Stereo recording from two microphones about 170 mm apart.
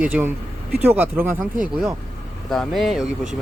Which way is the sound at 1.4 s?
50° right (ahead or behind).